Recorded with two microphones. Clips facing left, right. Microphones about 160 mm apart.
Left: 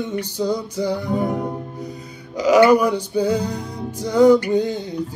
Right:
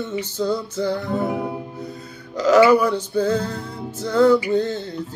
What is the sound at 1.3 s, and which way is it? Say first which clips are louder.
Music: left 1 dB; 5° right (ahead or behind).